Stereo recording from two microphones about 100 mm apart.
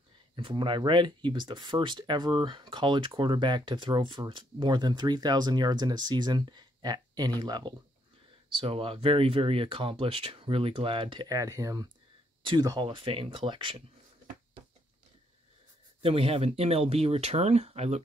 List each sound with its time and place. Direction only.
0.4 s speech: 55° right (ahead or behind)
8.5 s speech: 65° right (ahead or behind)
11.2 s speech: 35° right (ahead or behind)
12.6 s speech: 50° right (ahead or behind)
16.0 s speech: 75° right (ahead or behind); by 18.0 s 90° right